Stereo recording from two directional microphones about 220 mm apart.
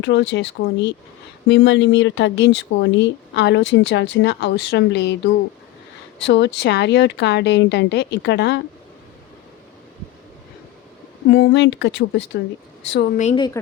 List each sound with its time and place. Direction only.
0.0 s speech: 55° left (ahead or behind)
11.3 s a woman's voice: 60° left (ahead or behind)
13.1 s speech: 30° left (ahead or behind)